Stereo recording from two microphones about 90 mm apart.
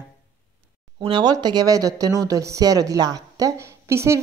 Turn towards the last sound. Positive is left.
turn(degrees=-30)  # may be behind; listen again after turning